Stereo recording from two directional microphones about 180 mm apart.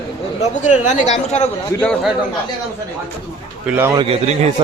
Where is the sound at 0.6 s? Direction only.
40° left (ahead or behind).